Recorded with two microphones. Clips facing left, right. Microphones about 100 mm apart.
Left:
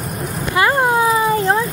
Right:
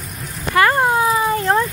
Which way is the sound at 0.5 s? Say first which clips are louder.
Right 2 dB; 15° left (ahead or behind).